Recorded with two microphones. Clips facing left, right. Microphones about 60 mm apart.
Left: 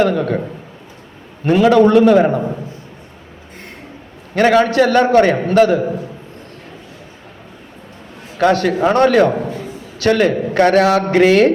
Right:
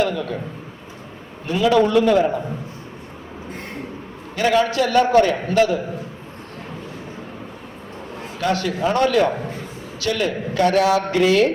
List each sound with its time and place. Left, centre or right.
0.0 s a man's voice: left
1.5 s a man's voice: left
4.4 s a man's voice: left
8.4 s a man's voice: left